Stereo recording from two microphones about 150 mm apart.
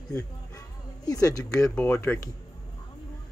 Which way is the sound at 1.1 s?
25° left (ahead or behind).